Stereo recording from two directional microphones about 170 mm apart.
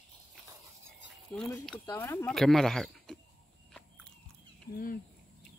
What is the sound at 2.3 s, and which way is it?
Speech, centre (ahead or behind).